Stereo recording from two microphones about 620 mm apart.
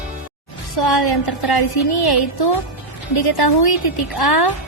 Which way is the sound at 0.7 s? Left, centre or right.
Left.